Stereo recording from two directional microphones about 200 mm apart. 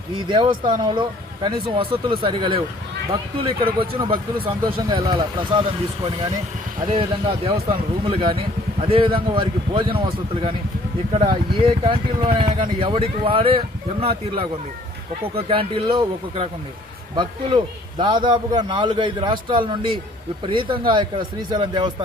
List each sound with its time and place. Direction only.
0.3 s a man's voice: 25° right (ahead or behind)
6.9 s a man's voice: 30° right (ahead or behind)
8.8 s a man's voice: 25° right (ahead or behind)
11.1 s a man's voice: 25° right (ahead or behind)